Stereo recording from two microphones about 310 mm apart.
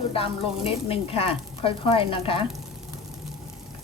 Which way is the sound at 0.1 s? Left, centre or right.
Centre.